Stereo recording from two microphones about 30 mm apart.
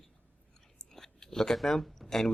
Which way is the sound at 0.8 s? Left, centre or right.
Centre.